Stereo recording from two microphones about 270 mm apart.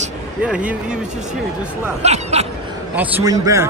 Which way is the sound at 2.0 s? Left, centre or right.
Right.